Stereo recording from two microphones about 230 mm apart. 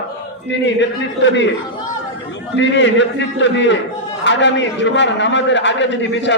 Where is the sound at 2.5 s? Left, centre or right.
Left.